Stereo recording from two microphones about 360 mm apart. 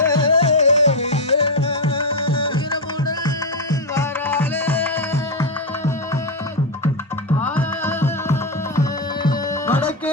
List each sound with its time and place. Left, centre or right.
0.0 s music: centre
7.4 s music: centre